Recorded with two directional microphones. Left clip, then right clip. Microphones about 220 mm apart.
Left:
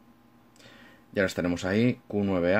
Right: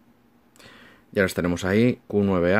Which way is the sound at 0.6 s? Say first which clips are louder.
Right 4 dB; 40° right (ahead or behind).